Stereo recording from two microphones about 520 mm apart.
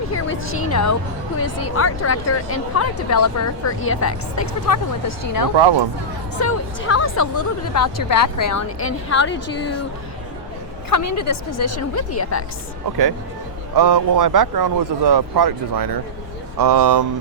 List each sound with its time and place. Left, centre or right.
0.1 s a woman's voice: left
5.5 s speech: right
6.8 s speech: left
8.8 s a woman's voice: left
10.8 s a woman's voice: left
13.7 s speech: right